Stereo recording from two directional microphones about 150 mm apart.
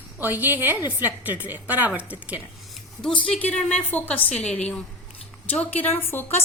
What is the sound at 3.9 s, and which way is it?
A woman's voice, 10° left (ahead or behind).